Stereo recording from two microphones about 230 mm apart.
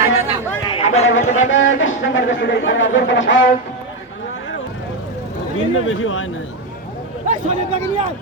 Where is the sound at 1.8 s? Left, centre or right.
Left.